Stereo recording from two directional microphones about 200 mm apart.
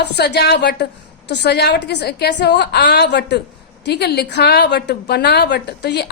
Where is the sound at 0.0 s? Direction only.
55° left (ahead or behind).